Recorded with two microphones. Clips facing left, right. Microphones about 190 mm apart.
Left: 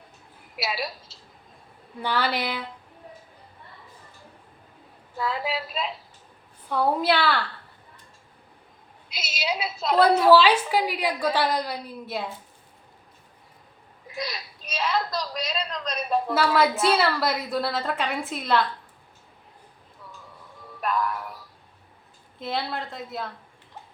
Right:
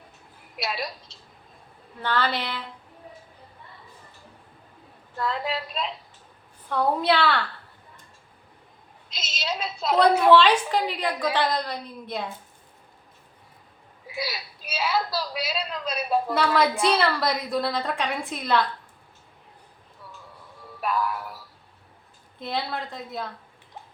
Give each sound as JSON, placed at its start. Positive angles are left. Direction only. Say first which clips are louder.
{"t": 0.5, "sound": "a woman's voice", "louder": "left 1 dB", "side_deg": 5}
{"t": 5.1, "sound": "a woman's voice", "louder": "even", "side_deg": 5}
{"t": 9.0, "sound": "a woman's voice", "louder": "left 2 dB", "side_deg": 10}
{"t": 14.1, "sound": "a woman's voice", "louder": "right 1 dB", "side_deg": -5}
{"t": 20.8, "sound": "a woman's voice", "louder": "even", "side_deg": -5}